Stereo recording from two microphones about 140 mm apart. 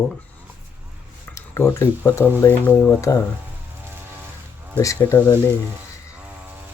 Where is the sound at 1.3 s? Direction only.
20° left (ahead or behind).